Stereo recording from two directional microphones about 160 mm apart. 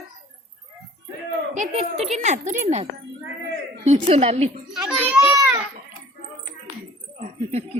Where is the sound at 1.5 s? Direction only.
45° right (ahead or behind).